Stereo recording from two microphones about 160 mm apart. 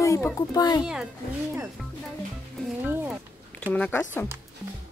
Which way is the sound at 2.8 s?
10° right (ahead or behind).